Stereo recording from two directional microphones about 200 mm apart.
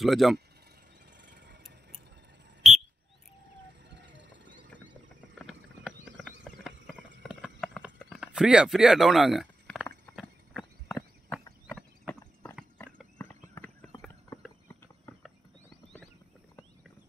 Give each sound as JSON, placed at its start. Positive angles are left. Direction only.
{"t": 0.0, "sound": "speech", "side_deg": 0}
{"t": 1.2, "sound": "a sound", "side_deg": -60}
{"t": 2.6, "sound": "a sound", "side_deg": 0}
{"t": 3.9, "sound": "music", "side_deg": -65}
{"t": 5.4, "sound": "clip-clop", "side_deg": 0}
{"t": 12.5, "sound": "clip-clop", "side_deg": 5}
{"t": 15.1, "sound": "horse", "side_deg": 15}